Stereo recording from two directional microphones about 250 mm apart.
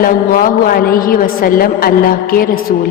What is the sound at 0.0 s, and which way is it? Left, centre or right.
Speech, left.